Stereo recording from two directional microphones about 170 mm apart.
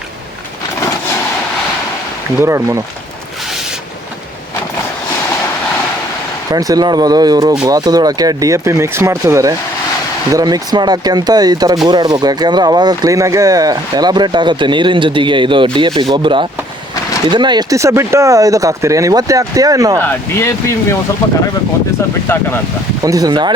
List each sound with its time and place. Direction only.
2.4 s speech: 15° right (ahead or behind)
6.5 s speech: 20° right (ahead or behind)
20.0 s speech: 15° left (ahead or behind)
22.3 s speech: 15° left (ahead or behind)
23.0 s speech: 20° right (ahead or behind)